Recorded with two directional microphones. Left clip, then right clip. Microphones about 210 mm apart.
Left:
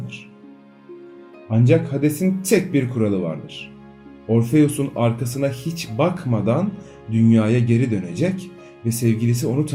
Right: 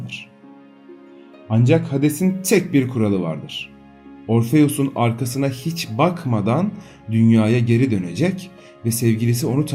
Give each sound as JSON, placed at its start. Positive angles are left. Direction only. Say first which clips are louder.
{"t": 1.5, "sound": "speech", "louder": "even", "side_deg": -35}